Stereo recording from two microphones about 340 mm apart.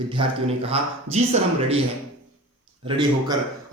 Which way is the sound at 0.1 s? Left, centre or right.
Centre.